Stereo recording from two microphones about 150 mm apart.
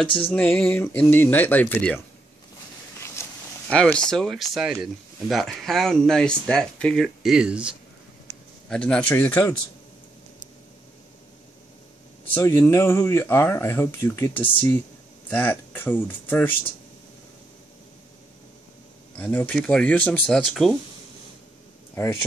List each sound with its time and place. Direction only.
0.3 s speech: 10° left (ahead or behind)
3.0 s a sound: 20° left (ahead or behind)
3.7 s speech: 5° left (ahead or behind)
8.6 s speech: 5° left (ahead or behind)
12.4 s speech: 15° left (ahead or behind)
19.1 s speech: 10° left (ahead or behind)
21.9 s speech: 15° left (ahead or behind)